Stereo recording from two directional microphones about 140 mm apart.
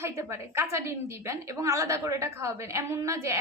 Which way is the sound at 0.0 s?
20° right (ahead or behind).